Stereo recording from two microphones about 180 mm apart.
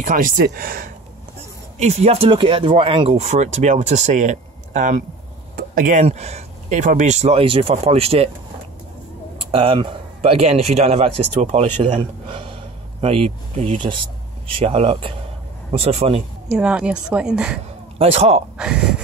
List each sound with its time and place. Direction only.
0.0 s speech: 50° right (ahead or behind)
1.8 s speech: 40° right (ahead or behind)
9.5 s speech: 30° right (ahead or behind)
16.4 s a woman's voice: 5° right (ahead or behind)
17.9 s speech: 35° right (ahead or behind)